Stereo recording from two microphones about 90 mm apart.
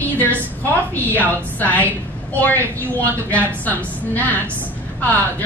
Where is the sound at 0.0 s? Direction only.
20° left (ahead or behind).